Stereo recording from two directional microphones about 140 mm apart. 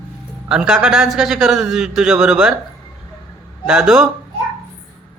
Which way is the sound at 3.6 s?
5° right (ahead or behind).